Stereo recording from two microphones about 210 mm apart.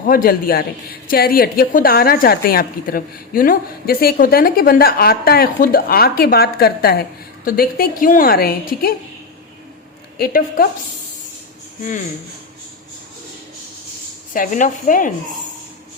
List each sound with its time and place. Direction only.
0.0 s a man's voice: 40° left (ahead or behind)
10.2 s a man's voice: 45° left (ahead or behind)
14.3 s a woman's voice: 40° left (ahead or behind)